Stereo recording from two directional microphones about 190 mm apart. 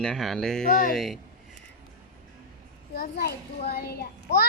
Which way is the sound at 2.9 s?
55° left (ahead or behind).